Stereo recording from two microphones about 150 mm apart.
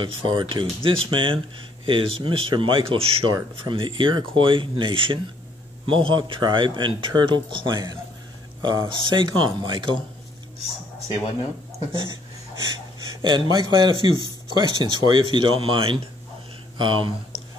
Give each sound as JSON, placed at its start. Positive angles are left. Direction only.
{"t": 0.0, "sound": "a man's voice", "side_deg": -35}
{"t": 11.9, "sound": "a sound", "side_deg": -35}
{"t": 13.2, "sound": "a man's voice", "side_deg": -30}